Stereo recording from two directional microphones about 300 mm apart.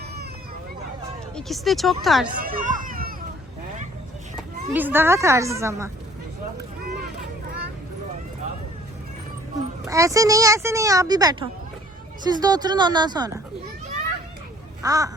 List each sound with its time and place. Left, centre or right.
1.4 s speech: centre
2.4 s a sound: right
4.4 s speech: centre
9.8 s speech: centre
14.8 s a child's voice: centre